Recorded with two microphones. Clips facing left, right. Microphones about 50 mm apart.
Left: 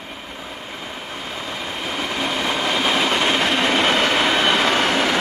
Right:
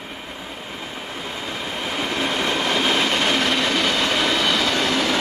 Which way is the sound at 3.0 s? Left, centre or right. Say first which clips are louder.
Left 1 dB; centre.